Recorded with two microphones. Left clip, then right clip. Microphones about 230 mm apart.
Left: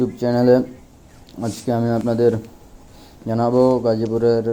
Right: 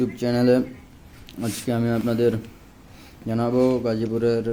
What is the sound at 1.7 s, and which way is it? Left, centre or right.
Speech, centre.